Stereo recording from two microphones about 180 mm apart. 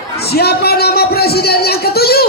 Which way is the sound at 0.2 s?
60° left (ahead or behind).